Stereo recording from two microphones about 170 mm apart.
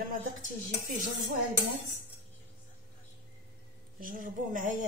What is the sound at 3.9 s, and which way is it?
Speech, 55° right (ahead or behind).